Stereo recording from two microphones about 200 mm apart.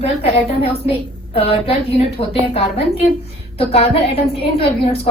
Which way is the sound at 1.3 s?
30° left (ahead or behind).